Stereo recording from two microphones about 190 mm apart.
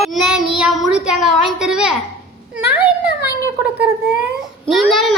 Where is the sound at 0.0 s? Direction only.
Centre (ahead or behind).